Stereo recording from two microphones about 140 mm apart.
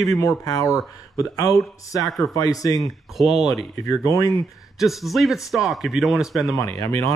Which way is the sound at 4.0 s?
25° left (ahead or behind).